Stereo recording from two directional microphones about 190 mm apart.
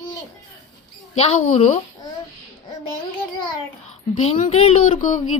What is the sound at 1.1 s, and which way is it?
Speech, 35° left (ahead or behind).